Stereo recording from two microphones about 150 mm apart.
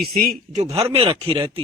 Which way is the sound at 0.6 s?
45° right (ahead or behind).